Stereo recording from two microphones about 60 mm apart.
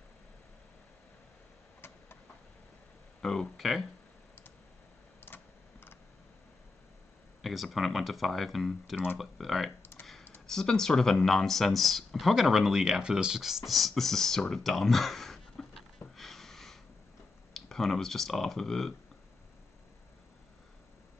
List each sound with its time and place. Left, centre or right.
3.2 s speech: centre
5.2 s typing: left
7.4 s speech: centre
10.4 s speech: centre
16.2 s a sound: centre
17.6 s speech: centre